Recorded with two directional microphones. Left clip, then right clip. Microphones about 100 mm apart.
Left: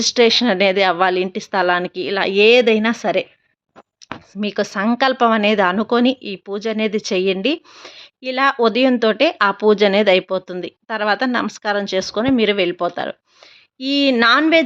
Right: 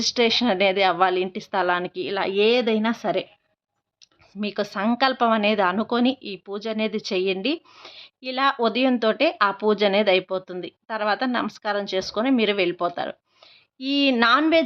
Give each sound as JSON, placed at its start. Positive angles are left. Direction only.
{"t": 0.0, "sound": "speech", "side_deg": 20}
{"t": 4.4, "sound": "speech", "side_deg": 25}